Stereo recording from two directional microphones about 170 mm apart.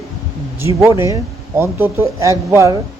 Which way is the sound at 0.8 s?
15° right (ahead or behind).